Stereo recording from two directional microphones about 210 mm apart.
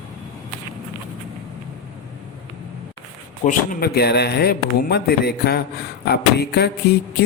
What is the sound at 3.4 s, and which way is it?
Speech, 40° left (ahead or behind).